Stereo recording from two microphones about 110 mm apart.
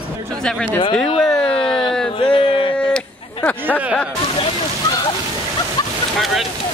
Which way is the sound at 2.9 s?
15° left (ahead or behind).